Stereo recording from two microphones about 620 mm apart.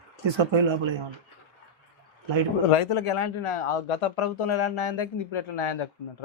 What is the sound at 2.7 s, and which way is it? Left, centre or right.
Speech, left.